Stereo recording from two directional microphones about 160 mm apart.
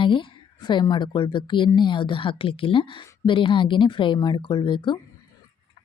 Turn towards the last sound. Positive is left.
turn(degrees=30)  # may be behind; listen again after turning